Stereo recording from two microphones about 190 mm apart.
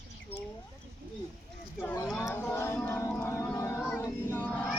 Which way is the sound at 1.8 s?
10° left (ahead or behind).